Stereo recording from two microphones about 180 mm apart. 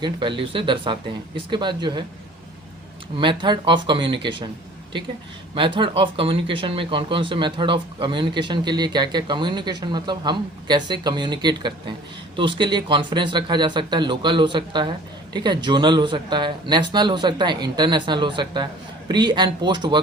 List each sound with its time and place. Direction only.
0.0 s speech: 25° right (ahead or behind)
3.2 s speech: 25° right (ahead or behind)
5.5 s speech: 25° right (ahead or behind)